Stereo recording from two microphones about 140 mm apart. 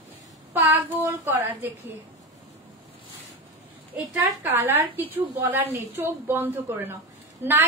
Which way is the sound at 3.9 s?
15° right (ahead or behind).